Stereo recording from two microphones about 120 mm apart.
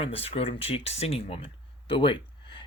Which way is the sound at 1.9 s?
45° left (ahead or behind).